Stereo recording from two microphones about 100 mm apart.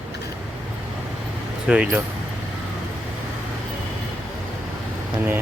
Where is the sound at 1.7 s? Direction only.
10° right (ahead or behind).